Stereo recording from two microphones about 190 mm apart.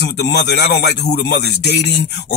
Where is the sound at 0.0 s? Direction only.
60° left (ahead or behind).